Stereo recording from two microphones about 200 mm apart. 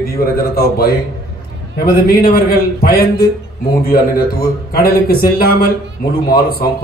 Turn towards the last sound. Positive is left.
turn(degrees=50)  # may be behind; listen again after turning